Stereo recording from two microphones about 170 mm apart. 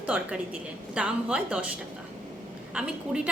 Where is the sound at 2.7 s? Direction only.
5° right (ahead or behind).